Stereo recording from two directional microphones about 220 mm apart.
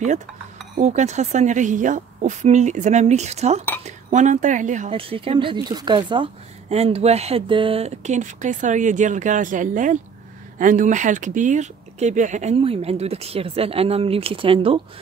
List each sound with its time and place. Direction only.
0.7 s speech: 30° right (ahead or behind)